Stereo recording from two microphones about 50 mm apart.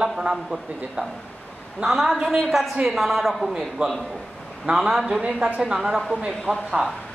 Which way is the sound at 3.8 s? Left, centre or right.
Centre.